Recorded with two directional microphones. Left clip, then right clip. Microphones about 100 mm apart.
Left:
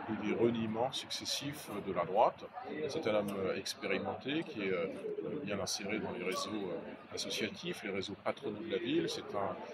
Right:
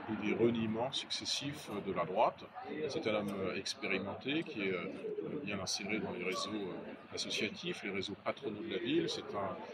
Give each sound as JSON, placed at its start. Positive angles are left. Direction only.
{"t": 0.2, "sound": "speech", "side_deg": 50}
{"t": 2.0, "sound": "speech", "side_deg": 50}